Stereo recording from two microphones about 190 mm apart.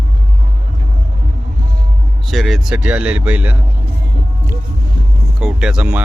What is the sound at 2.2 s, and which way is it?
A man's voice, centre (ahead or behind).